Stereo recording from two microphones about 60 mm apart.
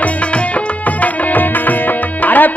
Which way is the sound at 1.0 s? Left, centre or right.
Left.